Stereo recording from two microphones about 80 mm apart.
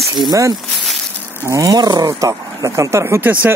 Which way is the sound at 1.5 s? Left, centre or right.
Right.